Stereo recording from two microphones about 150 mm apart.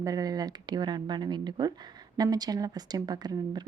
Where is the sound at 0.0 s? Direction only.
25° right (ahead or behind).